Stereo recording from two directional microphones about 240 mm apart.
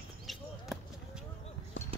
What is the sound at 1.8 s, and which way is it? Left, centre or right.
Clip-clop, left.